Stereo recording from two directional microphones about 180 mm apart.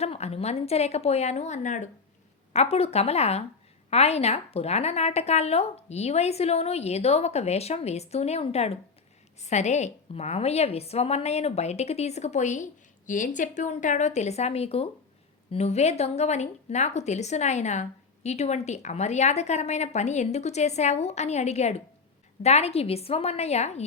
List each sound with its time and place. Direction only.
0.0 s a woman's voice: 35° left (ahead or behind)